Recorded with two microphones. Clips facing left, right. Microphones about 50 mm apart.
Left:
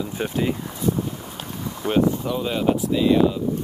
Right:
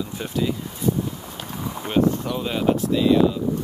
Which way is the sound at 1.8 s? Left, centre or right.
Right.